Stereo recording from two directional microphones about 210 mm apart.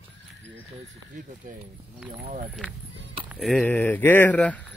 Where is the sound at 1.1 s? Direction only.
35° right (ahead or behind).